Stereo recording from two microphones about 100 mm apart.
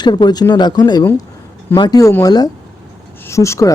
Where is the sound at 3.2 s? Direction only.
30° left (ahead or behind).